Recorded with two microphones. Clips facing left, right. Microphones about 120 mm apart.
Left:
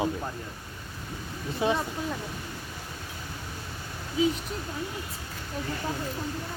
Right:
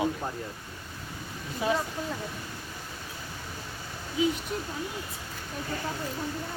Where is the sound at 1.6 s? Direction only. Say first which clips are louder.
Left 2 dB; 25° left (ahead or behind).